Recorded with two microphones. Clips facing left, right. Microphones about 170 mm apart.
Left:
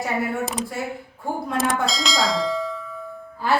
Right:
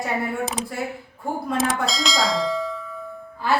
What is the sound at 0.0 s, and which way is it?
A woman's voice, centre (ahead or behind).